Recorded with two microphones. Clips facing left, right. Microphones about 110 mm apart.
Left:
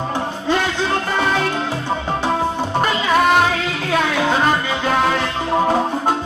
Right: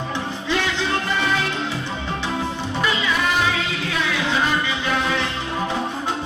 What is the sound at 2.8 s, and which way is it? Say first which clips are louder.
Music: left 6 dB; 50° left (ahead or behind).